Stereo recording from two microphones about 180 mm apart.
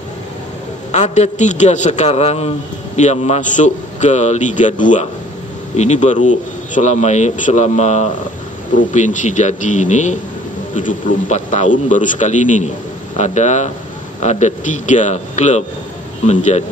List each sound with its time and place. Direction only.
0.9 s a man's voice: 40° left (ahead or behind)